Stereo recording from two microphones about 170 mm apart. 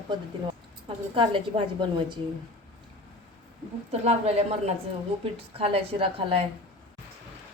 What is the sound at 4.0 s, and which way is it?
A woman's voice, 40° right (ahead or behind).